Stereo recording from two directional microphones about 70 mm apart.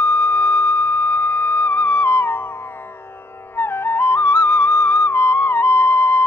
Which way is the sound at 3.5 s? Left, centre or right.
Left.